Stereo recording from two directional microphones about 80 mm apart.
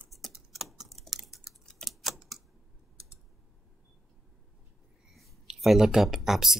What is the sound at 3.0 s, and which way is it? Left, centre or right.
Typing, left.